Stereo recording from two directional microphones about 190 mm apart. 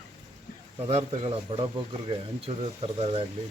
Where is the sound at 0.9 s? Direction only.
35° right (ahead or behind).